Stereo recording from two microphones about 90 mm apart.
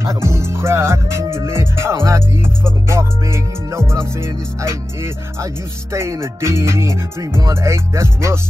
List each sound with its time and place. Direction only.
0.0 s speech: 30° right (ahead or behind)